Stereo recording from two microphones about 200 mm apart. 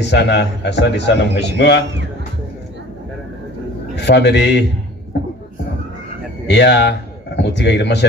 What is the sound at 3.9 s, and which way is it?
Speech, 60° left (ahead or behind).